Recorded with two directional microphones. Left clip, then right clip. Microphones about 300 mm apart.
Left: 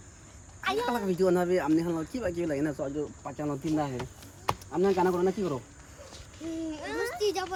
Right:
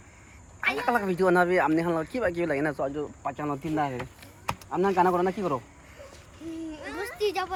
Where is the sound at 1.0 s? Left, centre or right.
Centre.